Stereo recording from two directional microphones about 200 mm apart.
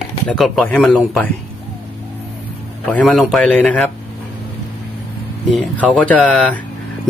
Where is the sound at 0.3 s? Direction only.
5° left (ahead or behind).